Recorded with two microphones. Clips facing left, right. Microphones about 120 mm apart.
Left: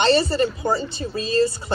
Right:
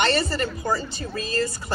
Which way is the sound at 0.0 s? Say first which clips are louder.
Left 5 dB; 25° left (ahead or behind).